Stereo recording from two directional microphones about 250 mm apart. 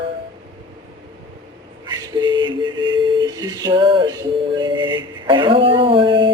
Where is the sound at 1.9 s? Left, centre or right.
Centre.